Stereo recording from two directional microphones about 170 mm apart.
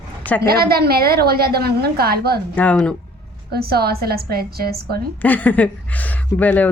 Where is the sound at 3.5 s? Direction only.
65° right (ahead or behind).